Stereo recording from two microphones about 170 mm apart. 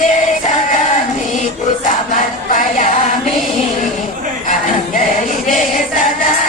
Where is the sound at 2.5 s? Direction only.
50° left (ahead or behind).